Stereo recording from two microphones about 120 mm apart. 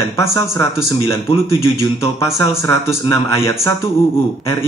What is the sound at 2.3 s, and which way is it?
Speech, 25° left (ahead or behind).